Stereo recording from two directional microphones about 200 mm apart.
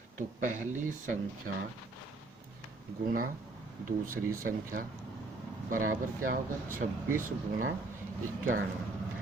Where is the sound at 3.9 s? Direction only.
45° right (ahead or behind).